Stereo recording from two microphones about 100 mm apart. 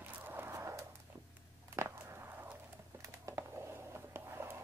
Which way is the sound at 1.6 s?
25° right (ahead or behind).